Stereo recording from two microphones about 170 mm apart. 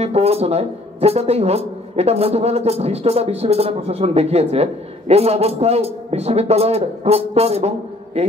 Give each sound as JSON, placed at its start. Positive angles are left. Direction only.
{"t": 0.0, "sound": "speech", "side_deg": -35}